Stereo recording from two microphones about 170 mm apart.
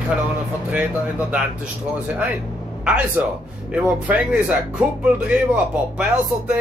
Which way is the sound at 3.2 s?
10° right (ahead or behind).